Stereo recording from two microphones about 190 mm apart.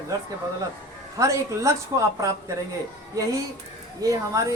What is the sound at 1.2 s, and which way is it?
Speech, 15° right (ahead or behind).